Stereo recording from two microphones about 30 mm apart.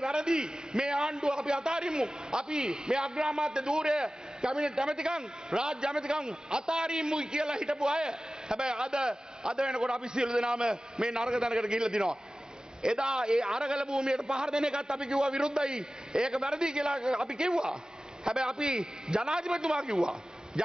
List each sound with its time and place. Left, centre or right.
0.0 s a man's voice: right
20.5 s a man's voice: centre